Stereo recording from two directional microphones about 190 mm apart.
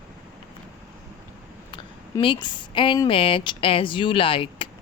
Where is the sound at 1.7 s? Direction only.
25° left (ahead or behind).